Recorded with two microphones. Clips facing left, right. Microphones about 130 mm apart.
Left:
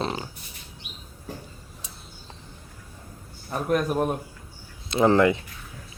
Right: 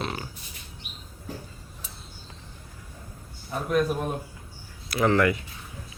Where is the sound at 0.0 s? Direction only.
30° left (ahead or behind).